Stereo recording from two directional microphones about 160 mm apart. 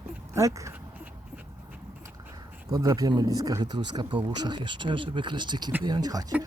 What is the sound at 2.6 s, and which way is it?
Speech, 25° right (ahead or behind).